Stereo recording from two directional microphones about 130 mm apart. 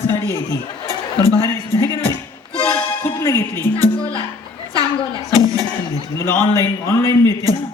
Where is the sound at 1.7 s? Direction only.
20° left (ahead or behind).